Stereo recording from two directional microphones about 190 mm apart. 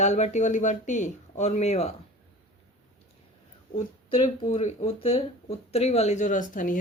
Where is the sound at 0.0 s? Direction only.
35° left (ahead or behind).